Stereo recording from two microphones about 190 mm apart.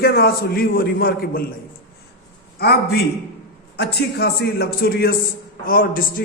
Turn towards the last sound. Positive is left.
turn(degrees=50)  # may be behind; listen again after turning